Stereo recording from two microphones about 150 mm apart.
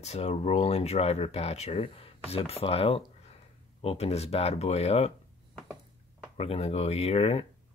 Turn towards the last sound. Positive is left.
turn(degrees=45)  # may be behind; listen again after turning